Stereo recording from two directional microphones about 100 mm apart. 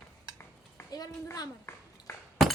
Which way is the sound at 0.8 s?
25° left (ahead or behind).